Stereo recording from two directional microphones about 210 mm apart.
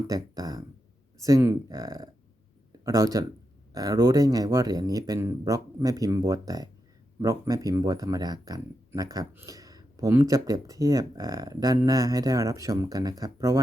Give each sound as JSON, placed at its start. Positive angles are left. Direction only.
{"t": 0.1, "sound": "speech", "side_deg": -15}